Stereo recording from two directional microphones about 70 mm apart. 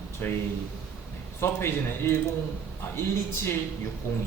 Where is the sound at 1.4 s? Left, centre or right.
Left.